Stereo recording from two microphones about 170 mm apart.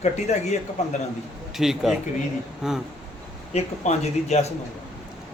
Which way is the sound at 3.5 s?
40° left (ahead or behind).